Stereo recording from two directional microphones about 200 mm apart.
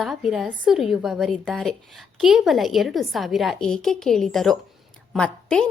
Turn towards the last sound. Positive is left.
turn(degrees=5)  # may be behind; listen again after turning